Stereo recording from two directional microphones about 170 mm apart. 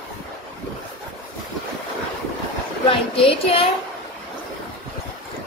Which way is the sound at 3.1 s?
35° left (ahead or behind).